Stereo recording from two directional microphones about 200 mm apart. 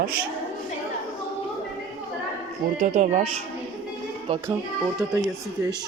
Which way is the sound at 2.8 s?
40° right (ahead or behind).